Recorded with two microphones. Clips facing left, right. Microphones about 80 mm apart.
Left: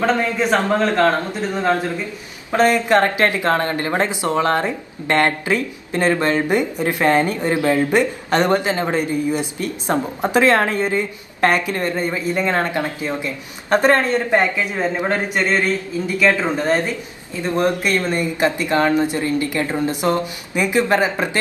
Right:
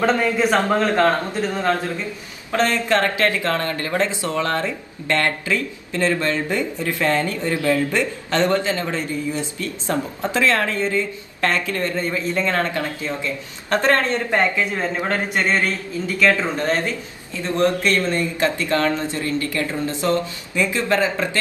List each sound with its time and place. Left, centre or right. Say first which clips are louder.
0.0 s a man's voice: even; centre
1.5 s speech: left 4 dB; centre